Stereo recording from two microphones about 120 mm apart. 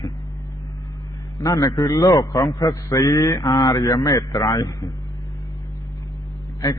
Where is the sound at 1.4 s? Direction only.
25° left (ahead or behind).